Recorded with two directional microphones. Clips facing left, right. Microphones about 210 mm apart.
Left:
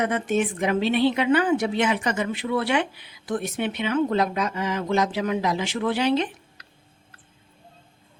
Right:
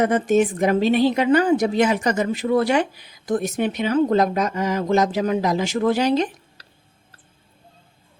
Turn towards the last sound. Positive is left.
turn(degrees=-40)  # may be behind; listen again after turning